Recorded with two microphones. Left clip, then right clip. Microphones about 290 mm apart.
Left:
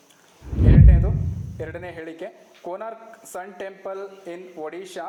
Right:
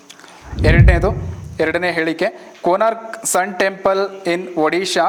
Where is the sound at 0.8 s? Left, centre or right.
Right.